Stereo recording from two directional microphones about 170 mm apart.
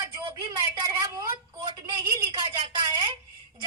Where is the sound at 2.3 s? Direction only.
30° right (ahead or behind).